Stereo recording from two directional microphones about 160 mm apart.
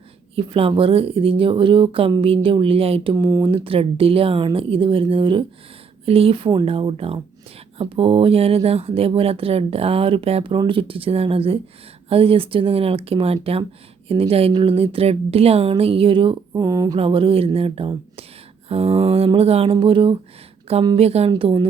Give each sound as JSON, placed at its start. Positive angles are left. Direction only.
{"t": 0.3, "sound": "speech", "side_deg": -35}
{"t": 3.2, "sound": "speech", "side_deg": -20}
{"t": 17.0, "sound": "speech", "side_deg": -35}